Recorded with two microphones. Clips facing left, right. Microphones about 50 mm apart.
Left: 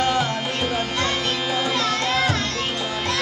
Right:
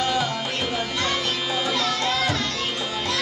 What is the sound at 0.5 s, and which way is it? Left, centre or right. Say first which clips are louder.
Music: left 2 dB; left.